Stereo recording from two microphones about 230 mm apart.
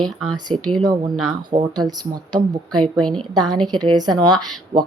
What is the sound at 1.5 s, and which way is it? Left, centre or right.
Speech, centre.